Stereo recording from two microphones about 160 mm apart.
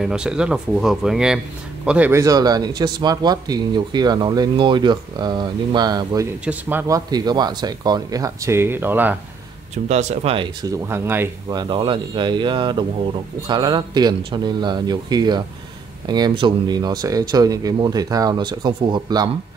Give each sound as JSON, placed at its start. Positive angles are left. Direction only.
{"t": 0.0, "sound": "speech", "side_deg": -5}
{"t": 6.4, "sound": "speech", "side_deg": -10}
{"t": 7.1, "sound": "speech", "side_deg": -25}
{"t": 9.8, "sound": "speech", "side_deg": -45}
{"t": 10.6, "sound": "speech", "side_deg": -15}
{"t": 11.4, "sound": "speech", "side_deg": -25}